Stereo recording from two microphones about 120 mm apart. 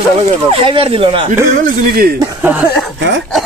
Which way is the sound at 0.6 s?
45° right (ahead or behind).